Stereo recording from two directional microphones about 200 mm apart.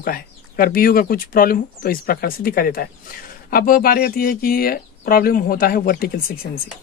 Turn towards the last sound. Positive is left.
turn(degrees=50)  # may be behind; listen again after turning